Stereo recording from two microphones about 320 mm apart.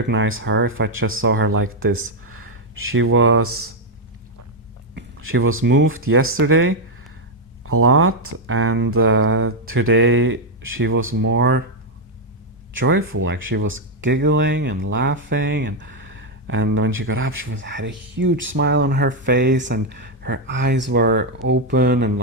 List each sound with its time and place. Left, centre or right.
0.1 s speech: right
4.9 s speech: right
12.7 s speech: right